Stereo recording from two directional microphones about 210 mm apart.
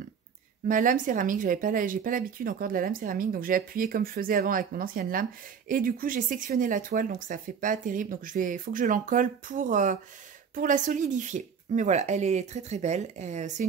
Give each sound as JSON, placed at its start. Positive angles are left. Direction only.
{"t": 0.7, "sound": "speech", "side_deg": -40}